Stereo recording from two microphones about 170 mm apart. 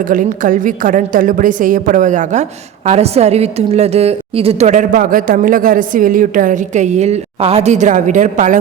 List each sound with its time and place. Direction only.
0.1 s a woman's voice: 55° right (ahead or behind)